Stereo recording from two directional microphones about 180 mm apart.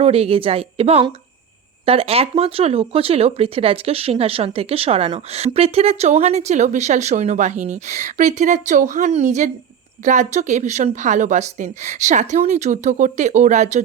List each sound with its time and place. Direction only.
0.0 s speech: 35° right (ahead or behind)